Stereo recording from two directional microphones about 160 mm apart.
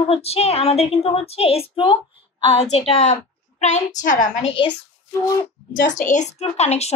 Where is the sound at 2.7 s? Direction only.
40° left (ahead or behind).